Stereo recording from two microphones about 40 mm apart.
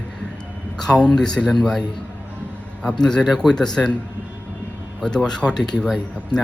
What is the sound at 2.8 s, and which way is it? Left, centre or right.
A man's voice, centre.